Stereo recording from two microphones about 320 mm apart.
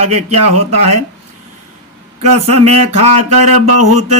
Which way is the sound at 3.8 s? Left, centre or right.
Right.